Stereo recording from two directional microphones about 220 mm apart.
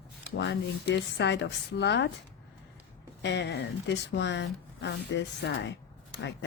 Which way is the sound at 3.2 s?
55° left (ahead or behind).